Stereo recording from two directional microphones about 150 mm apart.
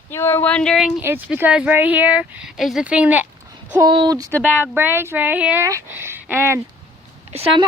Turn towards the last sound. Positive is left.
turn(degrees=-40)  # may be behind; listen again after turning